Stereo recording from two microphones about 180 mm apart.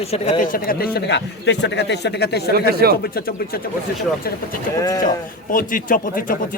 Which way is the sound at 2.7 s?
60° right (ahead or behind).